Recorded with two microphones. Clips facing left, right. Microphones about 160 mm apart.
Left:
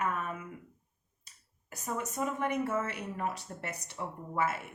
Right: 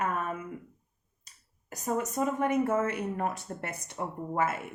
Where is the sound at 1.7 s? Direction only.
40° right (ahead or behind).